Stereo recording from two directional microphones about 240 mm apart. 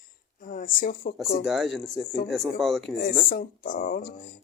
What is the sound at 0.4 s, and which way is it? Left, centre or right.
Speech, left.